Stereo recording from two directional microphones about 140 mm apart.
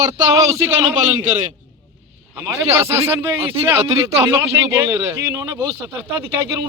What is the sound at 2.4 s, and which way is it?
A man's voice, 25° right (ahead or behind).